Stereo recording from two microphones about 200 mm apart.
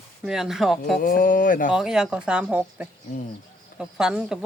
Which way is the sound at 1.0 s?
45° left (ahead or behind).